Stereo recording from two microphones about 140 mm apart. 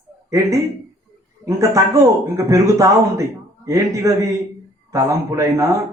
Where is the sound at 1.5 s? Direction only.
20° right (ahead or behind).